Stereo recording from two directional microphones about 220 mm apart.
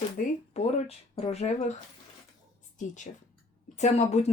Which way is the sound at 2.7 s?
35° left (ahead or behind).